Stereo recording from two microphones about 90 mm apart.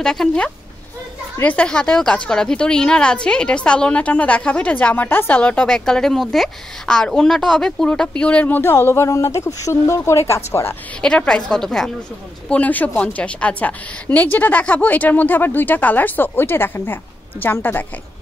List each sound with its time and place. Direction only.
0.0 s a woman's voice: 5° left (ahead or behind); by 10.8 s 30° left (ahead or behind)
11.0 s a woman's voice: 10° left (ahead or behind)
12.4 s a woman's voice: 15° left (ahead or behind)